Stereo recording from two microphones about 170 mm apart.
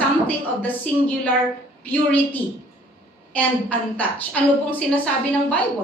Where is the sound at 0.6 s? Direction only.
10° left (ahead or behind).